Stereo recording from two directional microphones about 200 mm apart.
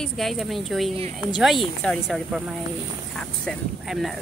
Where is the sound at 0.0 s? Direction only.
Centre (ahead or behind).